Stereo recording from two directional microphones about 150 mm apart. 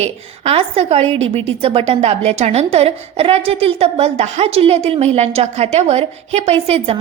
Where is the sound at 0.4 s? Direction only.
40° right (ahead or behind).